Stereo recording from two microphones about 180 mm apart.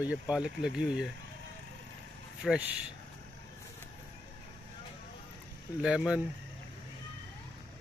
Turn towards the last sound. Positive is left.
turn(degrees=-5)  # may be behind; listen again after turning